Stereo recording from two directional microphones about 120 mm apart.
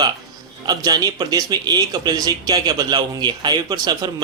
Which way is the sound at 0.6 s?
30° right (ahead or behind).